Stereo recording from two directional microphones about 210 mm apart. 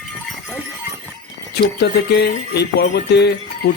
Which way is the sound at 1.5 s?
50° left (ahead or behind).